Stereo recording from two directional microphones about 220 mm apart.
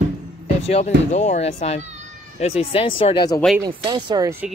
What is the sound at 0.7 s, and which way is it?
Speech, 30° left (ahead or behind).